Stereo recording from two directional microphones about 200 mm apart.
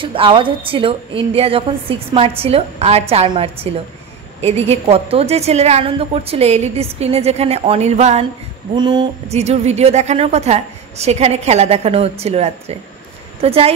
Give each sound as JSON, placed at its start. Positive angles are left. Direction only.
{"t": 0.0, "sound": "a woman's voice", "side_deg": -25}
{"t": 8.7, "sound": "a woman's voice", "side_deg": -20}